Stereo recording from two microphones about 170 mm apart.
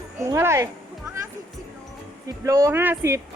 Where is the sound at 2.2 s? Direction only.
20° right (ahead or behind).